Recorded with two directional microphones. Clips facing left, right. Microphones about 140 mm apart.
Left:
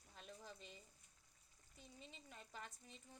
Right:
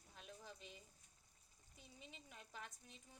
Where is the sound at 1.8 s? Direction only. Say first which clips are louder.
Left 1 dB; 5° right (ahead or behind).